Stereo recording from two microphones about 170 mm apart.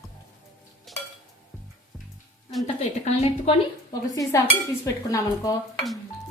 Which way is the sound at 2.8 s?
40° left (ahead or behind).